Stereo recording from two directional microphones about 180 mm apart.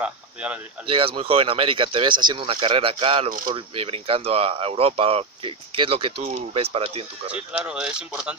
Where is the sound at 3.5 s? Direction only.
30° right (ahead or behind).